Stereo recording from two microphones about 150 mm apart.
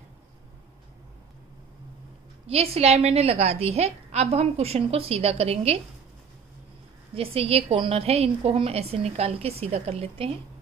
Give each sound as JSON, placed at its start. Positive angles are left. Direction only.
{"t": 2.4, "sound": "a woman's voice", "side_deg": -40}
{"t": 7.3, "sound": "a woman's voice", "side_deg": -40}